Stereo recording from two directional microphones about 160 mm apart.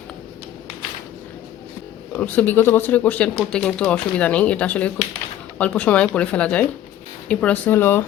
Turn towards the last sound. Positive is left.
turn(degrees=10)  # may be behind; listen again after turning